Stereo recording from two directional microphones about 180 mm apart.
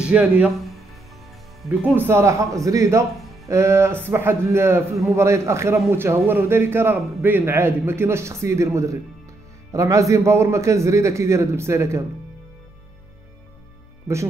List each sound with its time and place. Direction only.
0.0 s speech: 5° right (ahead or behind)
1.9 s a man's voice: 10° right (ahead or behind)